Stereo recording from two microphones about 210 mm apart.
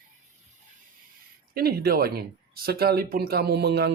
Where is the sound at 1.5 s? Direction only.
45° right (ahead or behind).